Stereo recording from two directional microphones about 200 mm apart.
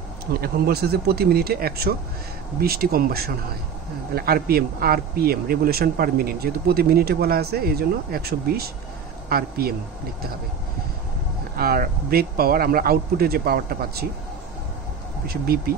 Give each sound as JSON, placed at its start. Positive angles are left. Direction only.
{"t": 0.3, "sound": "speech", "side_deg": -50}
{"t": 11.5, "sound": "speech", "side_deg": -50}
{"t": 15.2, "sound": "speech", "side_deg": -50}